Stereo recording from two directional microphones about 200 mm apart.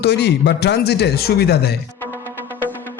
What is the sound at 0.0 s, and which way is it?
Speech, 55° left (ahead or behind).